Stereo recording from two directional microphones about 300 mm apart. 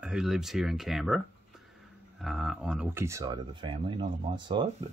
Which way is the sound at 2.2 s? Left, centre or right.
Centre.